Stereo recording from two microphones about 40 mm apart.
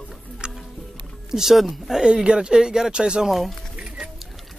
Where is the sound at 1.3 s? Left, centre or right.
Centre.